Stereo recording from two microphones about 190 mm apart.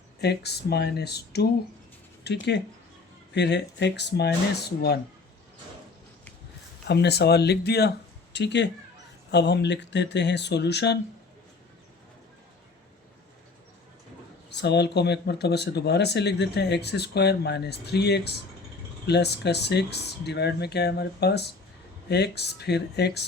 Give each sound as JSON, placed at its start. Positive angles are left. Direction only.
{"t": 0.2, "sound": "speech", "side_deg": 60}
{"t": 6.8, "sound": "speech", "side_deg": 60}
{"t": 14.5, "sound": "speech", "side_deg": 65}